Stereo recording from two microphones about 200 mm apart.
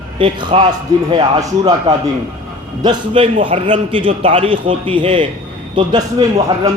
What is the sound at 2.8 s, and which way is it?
A man's voice, 25° right (ahead or behind).